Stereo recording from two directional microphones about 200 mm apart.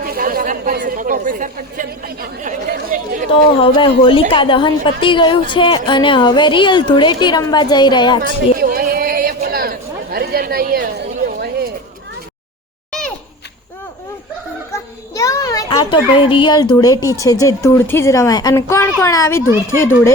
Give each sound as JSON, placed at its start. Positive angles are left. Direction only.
{"t": 0.0, "sound": "chatter", "side_deg": -45}
{"t": 0.9, "sound": "speech", "side_deg": -40}
{"t": 3.6, "sound": "a woman's voice", "side_deg": 25}
{"t": 8.5, "sound": "chatter", "side_deg": -45}
{"t": 12.9, "sound": "a sound", "side_deg": 5}
{"t": 15.1, "sound": "a sound", "side_deg": 15}
{"t": 16.7, "sound": "a woman's voice", "side_deg": 20}